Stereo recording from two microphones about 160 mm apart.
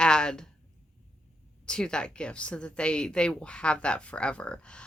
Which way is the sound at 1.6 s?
5° left (ahead or behind).